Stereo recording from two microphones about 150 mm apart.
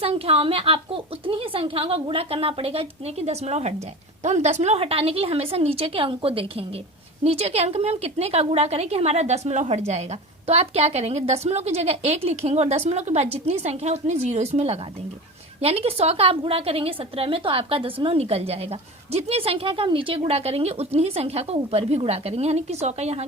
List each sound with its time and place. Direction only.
0.0 s a woman's voice: 40° right (ahead or behind)